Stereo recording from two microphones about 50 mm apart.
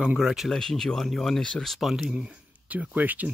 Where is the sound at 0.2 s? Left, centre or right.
Centre.